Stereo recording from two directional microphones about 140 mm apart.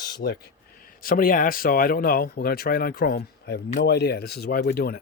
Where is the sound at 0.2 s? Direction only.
90° left.